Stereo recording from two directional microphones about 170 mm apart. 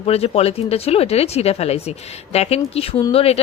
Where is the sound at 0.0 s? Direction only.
35° left (ahead or behind).